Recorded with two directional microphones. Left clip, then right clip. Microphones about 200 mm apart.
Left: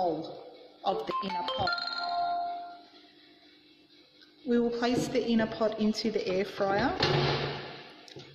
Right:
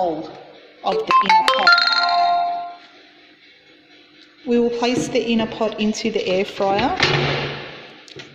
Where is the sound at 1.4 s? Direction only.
45° right (ahead or behind).